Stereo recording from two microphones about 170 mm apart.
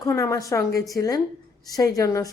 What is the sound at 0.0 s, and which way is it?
A woman's voice, 20° left (ahead or behind).